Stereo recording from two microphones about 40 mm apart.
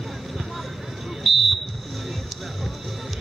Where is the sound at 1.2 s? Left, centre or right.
Centre.